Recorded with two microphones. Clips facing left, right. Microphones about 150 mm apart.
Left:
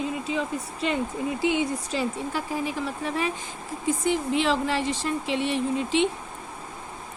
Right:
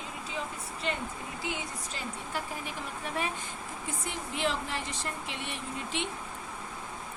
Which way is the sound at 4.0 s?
90° left.